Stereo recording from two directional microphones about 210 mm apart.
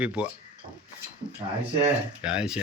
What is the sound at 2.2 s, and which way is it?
Speech, 5° right (ahead or behind).